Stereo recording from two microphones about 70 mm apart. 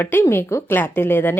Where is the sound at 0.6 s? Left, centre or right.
Left.